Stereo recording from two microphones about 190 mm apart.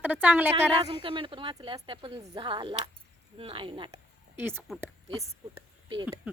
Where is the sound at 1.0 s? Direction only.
25° right (ahead or behind).